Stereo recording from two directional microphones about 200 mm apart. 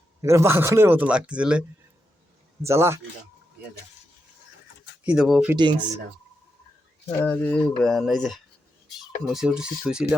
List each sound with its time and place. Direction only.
0.2 s speech: 15° right (ahead or behind)
2.6 s speech: 15° right (ahead or behind)
5.0 s speech: centre (ahead or behind)
5.5 s speech: 25° right (ahead or behind)
7.2 s speech: 10° left (ahead or behind)